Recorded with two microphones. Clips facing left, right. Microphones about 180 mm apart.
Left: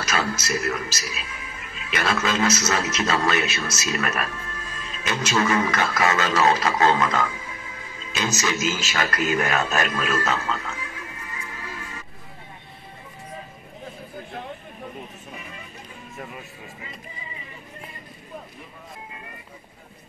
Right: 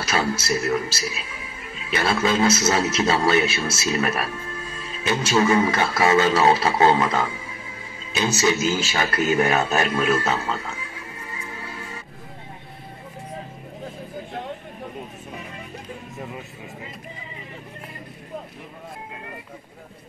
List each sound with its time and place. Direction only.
0.0 s speech: 30° right (ahead or behind)
9.8 s music: 30° right (ahead or behind)